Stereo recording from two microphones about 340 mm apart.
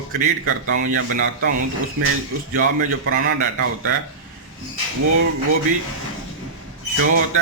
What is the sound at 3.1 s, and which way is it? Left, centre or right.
Speech, right.